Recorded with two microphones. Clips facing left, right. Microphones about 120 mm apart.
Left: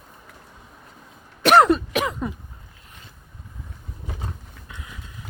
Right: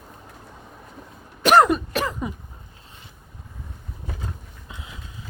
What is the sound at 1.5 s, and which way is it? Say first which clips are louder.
Cough: left 1 dB; 5° right (ahead or behind).